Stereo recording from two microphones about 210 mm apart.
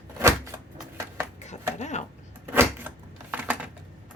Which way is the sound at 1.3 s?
35° left (ahead or behind).